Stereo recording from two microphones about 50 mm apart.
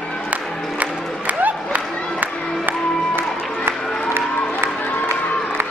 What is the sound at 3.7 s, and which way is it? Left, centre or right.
Music, right.